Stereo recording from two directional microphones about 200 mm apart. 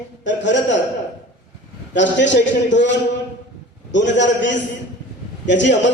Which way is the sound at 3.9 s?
65° left (ahead or behind).